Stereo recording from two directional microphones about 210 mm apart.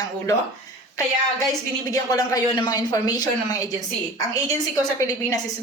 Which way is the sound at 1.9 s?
15° left (ahead or behind).